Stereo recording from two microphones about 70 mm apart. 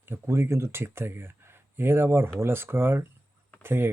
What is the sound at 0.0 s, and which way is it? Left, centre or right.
Speech, right.